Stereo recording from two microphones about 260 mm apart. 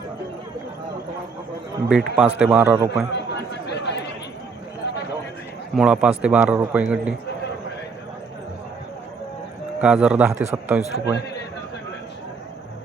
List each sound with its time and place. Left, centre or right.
1.9 s a man's voice: centre
3.1 s a sound: left
5.7 s a man's voice: centre
9.8 s a man's voice: centre